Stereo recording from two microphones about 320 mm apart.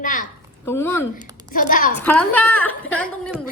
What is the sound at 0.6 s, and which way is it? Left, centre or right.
Speech, centre.